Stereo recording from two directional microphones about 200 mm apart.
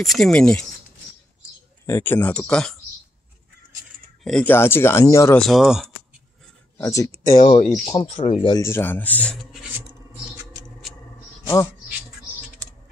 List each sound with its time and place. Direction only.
0.0 s speech: centre (ahead or behind)
1.9 s speech: 10° left (ahead or behind)
4.2 s speech: 5° left (ahead or behind)
5.4 s speech: centre (ahead or behind)
6.8 s speech: 15° left (ahead or behind)
7.3 s speech: 30° left (ahead or behind)
7.6 s speech: 5° left (ahead or behind)
8.0 s speech: 35° left (ahead or behind); by 9.7 s centre (ahead or behind)
11.4 s speech: 15° left (ahead or behind)